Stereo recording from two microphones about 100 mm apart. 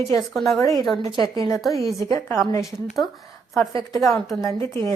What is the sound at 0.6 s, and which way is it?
Speech, 35° left (ahead or behind).